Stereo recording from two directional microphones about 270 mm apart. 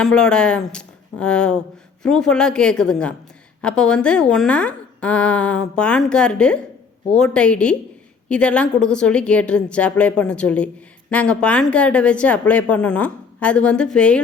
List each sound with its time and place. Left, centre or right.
0.0 s speech: centre